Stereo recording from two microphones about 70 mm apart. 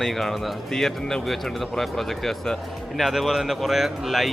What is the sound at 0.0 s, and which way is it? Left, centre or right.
A man's voice, centre.